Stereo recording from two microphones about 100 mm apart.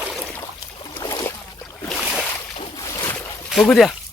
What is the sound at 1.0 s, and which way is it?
Boat, 30° left (ahead or behind).